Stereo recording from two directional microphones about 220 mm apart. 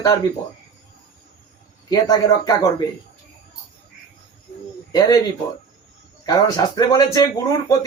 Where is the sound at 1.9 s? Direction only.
20° left (ahead or behind).